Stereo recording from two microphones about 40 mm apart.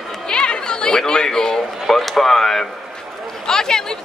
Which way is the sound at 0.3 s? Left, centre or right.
Left.